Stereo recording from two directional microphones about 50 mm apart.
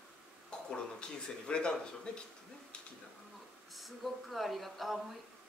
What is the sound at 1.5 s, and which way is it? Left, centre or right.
Speech, centre.